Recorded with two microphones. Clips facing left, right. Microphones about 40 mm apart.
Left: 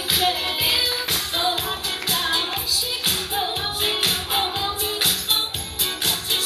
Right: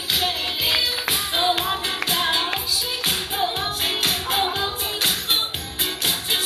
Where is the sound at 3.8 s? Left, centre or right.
Centre.